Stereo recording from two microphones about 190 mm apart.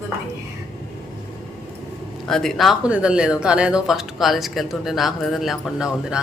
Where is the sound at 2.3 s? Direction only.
Centre (ahead or behind).